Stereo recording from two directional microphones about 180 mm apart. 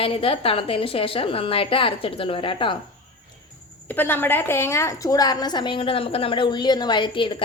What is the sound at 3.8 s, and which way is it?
A woman's voice, 10° left (ahead or behind).